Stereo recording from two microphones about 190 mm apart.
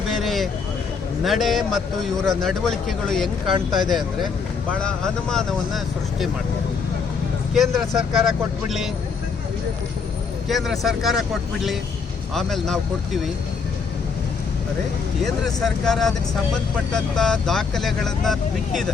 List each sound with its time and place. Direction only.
0.1 s vehicle: centre (ahead or behind)
1.2 s speech: centre (ahead or behind)
3.4 s speech: 30° right (ahead or behind)
3.8 s speech: centre (ahead or behind)
7.5 s speech: centre (ahead or behind)
10.5 s speech: centre (ahead or behind)
12.3 s speech: centre (ahead or behind)
15.2 s speech: centre (ahead or behind)